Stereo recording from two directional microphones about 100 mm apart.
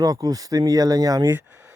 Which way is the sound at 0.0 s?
40° right (ahead or behind).